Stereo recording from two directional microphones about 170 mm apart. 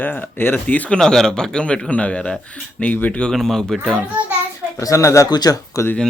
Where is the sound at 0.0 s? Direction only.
10° left (ahead or behind).